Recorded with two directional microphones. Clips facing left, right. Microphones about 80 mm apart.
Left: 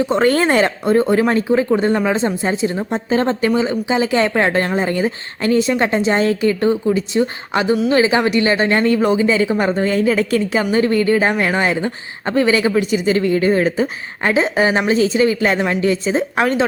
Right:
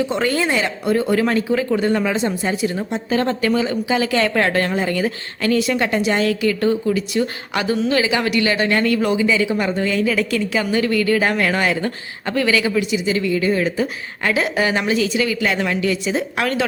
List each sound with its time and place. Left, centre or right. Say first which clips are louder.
0.0 s speech: left 5 dB; left